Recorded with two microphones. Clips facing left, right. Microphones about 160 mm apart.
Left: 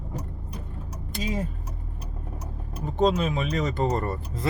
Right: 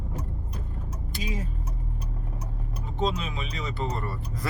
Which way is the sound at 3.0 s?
50° left (ahead or behind).